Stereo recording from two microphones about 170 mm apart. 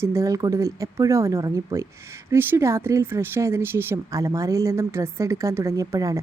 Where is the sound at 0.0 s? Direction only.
15° right (ahead or behind).